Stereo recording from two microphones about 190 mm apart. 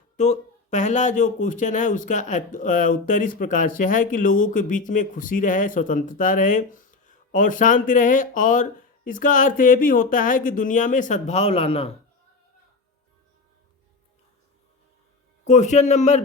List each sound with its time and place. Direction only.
0.2 s speech: 40° left (ahead or behind)
15.4 s a man's voice: 40° left (ahead or behind)